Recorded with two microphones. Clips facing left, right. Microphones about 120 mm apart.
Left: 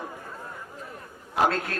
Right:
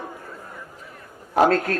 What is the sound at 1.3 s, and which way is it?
Speech, 45° right (ahead or behind).